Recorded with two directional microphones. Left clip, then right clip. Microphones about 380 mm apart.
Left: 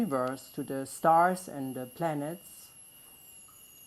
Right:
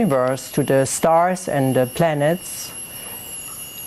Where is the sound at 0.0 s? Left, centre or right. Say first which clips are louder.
Right 13 dB; right.